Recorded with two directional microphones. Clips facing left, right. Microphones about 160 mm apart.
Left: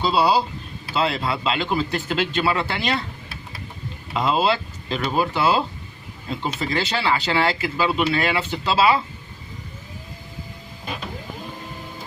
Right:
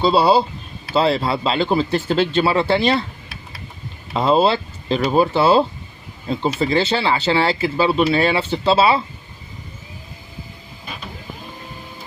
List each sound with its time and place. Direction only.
0.0 s speech: 25° right (ahead or behind)
4.1 s speech: 30° right (ahead or behind)